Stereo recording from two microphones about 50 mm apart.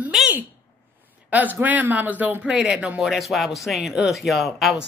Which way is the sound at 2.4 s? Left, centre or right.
Centre.